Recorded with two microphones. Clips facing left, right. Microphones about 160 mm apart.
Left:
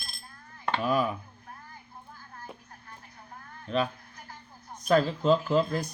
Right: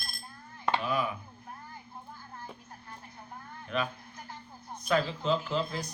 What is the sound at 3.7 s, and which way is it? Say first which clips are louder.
Speech: left 4 dB; 35° left (ahead or behind).